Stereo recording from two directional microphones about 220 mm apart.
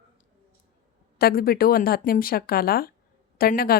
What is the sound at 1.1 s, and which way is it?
A woman's voice, 45° left (ahead or behind).